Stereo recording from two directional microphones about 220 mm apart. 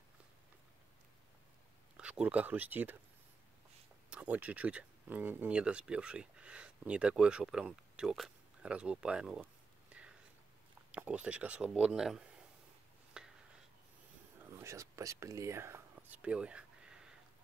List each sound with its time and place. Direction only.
2.0 s speech: 5° right (ahead or behind)
4.1 s speech: 5° right (ahead or behind)
10.0 s whispering: 5° right (ahead or behind)
10.9 s speech: 5° right (ahead or behind)
13.2 s a sound: 5° right (ahead or behind)
14.4 s whispering: 10° right (ahead or behind)